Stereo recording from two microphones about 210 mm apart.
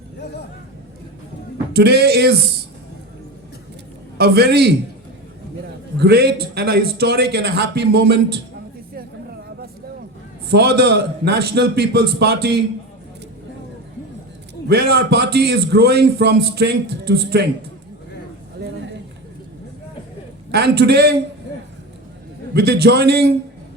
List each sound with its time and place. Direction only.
1.7 s a man's voice: 50° right (ahead or behind)
4.2 s a man's voice: 50° right (ahead or behind)
6.0 s a man's voice: 50° right (ahead or behind)
10.5 s a man's voice: 50° right (ahead or behind)
14.7 s a man's voice: 50° right (ahead or behind)
20.5 s a man's voice: 50° right (ahead or behind)
22.5 s a man's voice: 50° right (ahead or behind)